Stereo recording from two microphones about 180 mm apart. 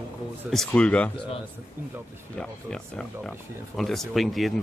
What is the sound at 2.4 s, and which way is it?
Speech, 5° left (ahead or behind).